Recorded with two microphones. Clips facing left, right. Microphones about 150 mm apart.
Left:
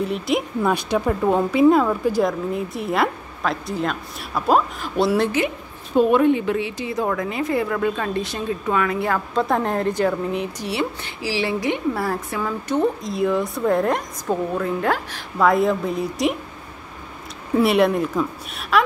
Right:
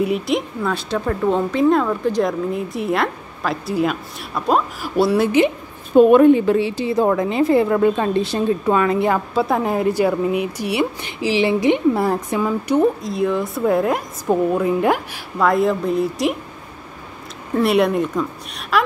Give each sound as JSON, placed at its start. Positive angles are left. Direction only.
{"t": 0.0, "sound": "speech", "side_deg": -5}
{"t": 0.7, "sound": "speech", "side_deg": 15}
{"t": 5.9, "sound": "a woman's voice", "side_deg": -45}
{"t": 9.3, "sound": "a woman's voice", "side_deg": -5}
{"t": 13.1, "sound": "speech", "side_deg": 0}
{"t": 14.3, "sound": "a woman's voice", "side_deg": -15}
{"t": 15.3, "sound": "speech", "side_deg": 0}
{"t": 17.6, "sound": "speech", "side_deg": 0}